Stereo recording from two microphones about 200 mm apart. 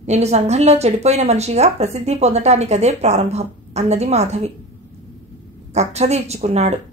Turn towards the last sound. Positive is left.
turn(degrees=-35)  # may be behind; listen again after turning